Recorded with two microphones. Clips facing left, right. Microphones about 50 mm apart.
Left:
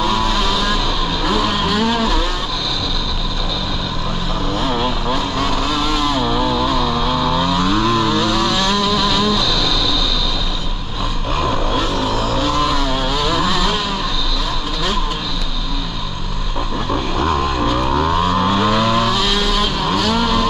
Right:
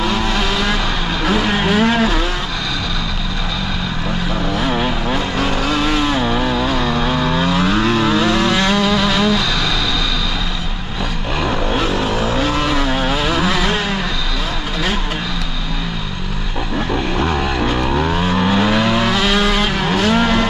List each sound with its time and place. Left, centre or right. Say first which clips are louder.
0.0 s vehicle: left 1 dB; right
4.6 s vehicle: even; right
12.0 s vehicle: right 1 dB; right
16.9 s vehicle: left 1 dB; right
18.1 s vehicle: even; right